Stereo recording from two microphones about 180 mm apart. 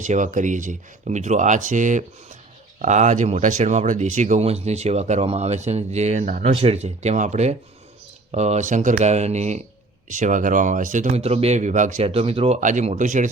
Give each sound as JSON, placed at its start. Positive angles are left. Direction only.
{"t": 0.0, "sound": "speech", "side_deg": -40}
{"t": 12.5, "sound": "speech", "side_deg": -45}